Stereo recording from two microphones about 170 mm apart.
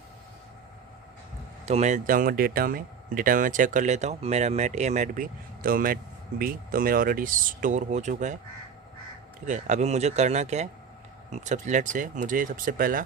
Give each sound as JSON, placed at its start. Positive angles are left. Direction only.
{"t": 1.6, "sound": "speech", "side_deg": -40}
{"t": 9.5, "sound": "speech", "side_deg": -45}